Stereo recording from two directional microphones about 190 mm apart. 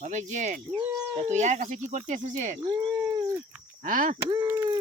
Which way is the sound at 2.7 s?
20° right (ahead or behind).